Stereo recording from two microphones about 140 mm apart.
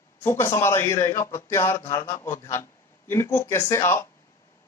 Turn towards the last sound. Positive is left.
turn(degrees=20)  # may be behind; listen again after turning